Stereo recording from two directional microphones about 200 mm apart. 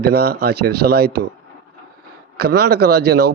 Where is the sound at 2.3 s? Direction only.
55° right (ahead or behind).